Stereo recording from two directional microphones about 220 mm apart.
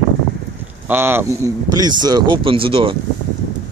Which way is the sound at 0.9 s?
10° right (ahead or behind).